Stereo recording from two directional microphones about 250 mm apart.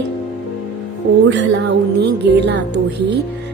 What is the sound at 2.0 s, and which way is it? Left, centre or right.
Music, right.